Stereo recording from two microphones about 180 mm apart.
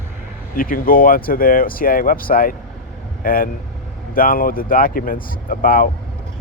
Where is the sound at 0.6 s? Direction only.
50° left (ahead or behind).